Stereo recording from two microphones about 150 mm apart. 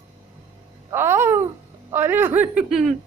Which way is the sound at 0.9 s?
15° right (ahead or behind).